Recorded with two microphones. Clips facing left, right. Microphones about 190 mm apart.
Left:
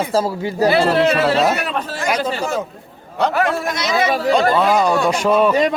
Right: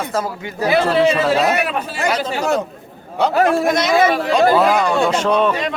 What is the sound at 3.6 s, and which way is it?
Speech, 50° right (ahead or behind).